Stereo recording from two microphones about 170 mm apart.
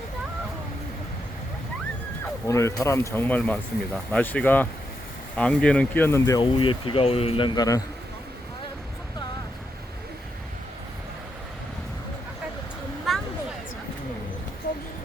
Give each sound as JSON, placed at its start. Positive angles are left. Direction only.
{"t": 2.5, "sound": "speech", "side_deg": 15}
{"t": 6.4, "sound": "speech", "side_deg": 30}
{"t": 13.1, "sound": "a sound", "side_deg": 0}